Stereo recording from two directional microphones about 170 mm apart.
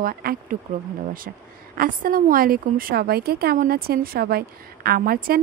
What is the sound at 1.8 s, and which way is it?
A woman's voice, 55° right (ahead or behind).